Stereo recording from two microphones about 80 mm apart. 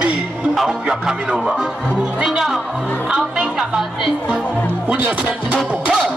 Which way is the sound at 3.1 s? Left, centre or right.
Centre.